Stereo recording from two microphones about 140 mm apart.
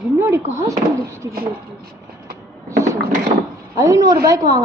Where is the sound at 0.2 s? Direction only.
15° right (ahead or behind).